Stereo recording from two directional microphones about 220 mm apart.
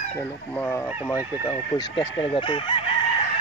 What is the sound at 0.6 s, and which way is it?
Speech, 5° left (ahead or behind).